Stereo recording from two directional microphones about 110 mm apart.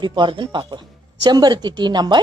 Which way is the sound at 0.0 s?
45° right (ahead or behind).